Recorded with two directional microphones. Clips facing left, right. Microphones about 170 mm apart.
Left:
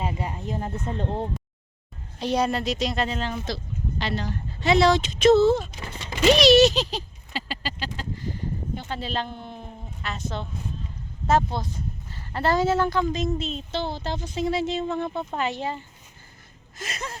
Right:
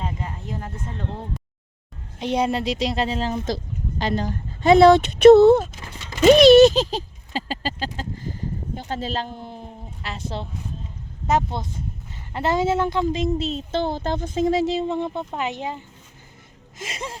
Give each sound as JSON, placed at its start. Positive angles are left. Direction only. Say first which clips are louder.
{"t": 0.0, "sound": "speech", "louder": "left 2 dB", "side_deg": 10}
{"t": 2.1, "sound": "speech", "louder": "right 2 dB", "side_deg": -20}
{"t": 6.2, "sound": "speech", "louder": "right 6 dB", "side_deg": -50}
{"t": 7.3, "sound": "a sound", "louder": "right 5 dB", "side_deg": -40}
{"t": 8.7, "sound": "speech", "louder": "right 3 dB", "side_deg": -40}
{"t": 11.5, "sound": "speech", "louder": "even", "side_deg": -20}